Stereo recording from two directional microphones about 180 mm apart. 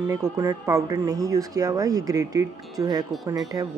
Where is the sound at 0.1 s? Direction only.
20° right (ahead or behind).